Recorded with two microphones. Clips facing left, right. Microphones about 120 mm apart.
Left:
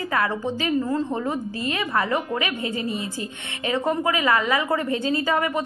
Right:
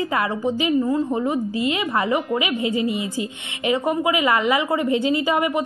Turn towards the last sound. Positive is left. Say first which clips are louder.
# right 2 dB
turn(degrees=-15)  # may be behind; listen again after turning